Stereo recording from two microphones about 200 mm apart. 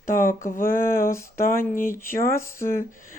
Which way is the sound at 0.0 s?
45° left (ahead or behind).